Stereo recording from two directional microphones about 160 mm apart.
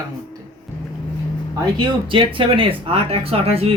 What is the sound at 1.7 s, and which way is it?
Speech, 30° right (ahead or behind).